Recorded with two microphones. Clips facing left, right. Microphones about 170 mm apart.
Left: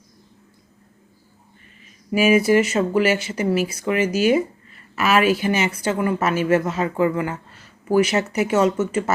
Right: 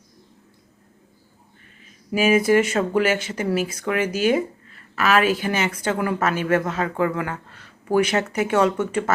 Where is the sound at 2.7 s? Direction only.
10° left (ahead or behind).